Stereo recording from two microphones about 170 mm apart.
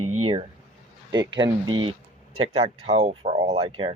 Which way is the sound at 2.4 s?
35° right (ahead or behind).